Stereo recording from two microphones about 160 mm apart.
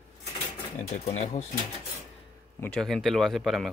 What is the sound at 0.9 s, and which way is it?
Speech, 45° left (ahead or behind).